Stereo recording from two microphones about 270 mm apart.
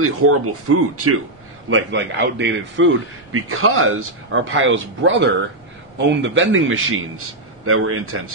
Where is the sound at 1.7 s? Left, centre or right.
Right.